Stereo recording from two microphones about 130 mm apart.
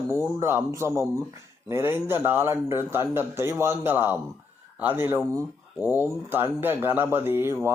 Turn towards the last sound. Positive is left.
turn(degrees=-20)  # may be behind; listen again after turning